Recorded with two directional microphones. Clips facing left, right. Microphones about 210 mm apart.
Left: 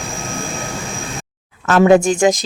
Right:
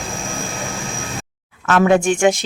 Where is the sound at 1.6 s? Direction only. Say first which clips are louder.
Left 3 dB; 35° left (ahead or behind).